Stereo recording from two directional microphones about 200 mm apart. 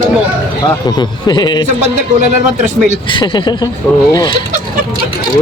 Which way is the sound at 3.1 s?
25° left (ahead or behind).